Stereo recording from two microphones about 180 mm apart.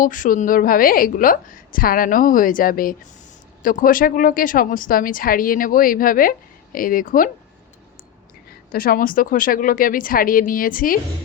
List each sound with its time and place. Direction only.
0.0 s a woman's voice: 50° left (ahead or behind)
8.7 s a woman's voice: 55° left (ahead or behind)